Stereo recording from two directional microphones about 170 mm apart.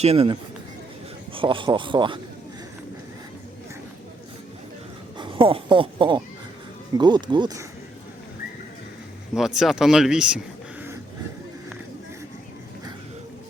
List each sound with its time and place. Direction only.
0.0 s speech: 35° right (ahead or behind)
5.1 s speech: 30° right (ahead or behind)
9.3 s speech: centre (ahead or behind)